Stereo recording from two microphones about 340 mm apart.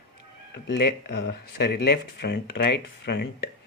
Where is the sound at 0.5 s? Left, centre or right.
Left.